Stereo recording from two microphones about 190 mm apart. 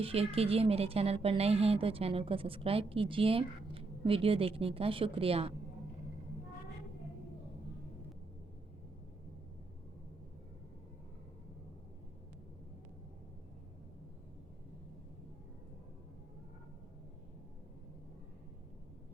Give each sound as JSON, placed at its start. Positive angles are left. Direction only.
{"t": 0.0, "sound": "speech", "side_deg": -30}